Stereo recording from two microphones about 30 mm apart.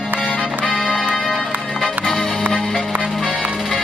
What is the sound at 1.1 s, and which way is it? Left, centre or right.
Music, centre.